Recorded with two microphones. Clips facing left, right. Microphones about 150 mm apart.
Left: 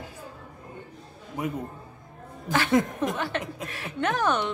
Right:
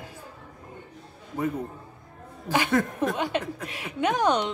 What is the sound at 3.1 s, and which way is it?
A woman's voice, 15° right (ahead or behind).